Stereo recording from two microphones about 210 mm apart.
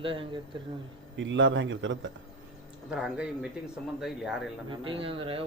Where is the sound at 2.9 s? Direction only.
5° right (ahead or behind).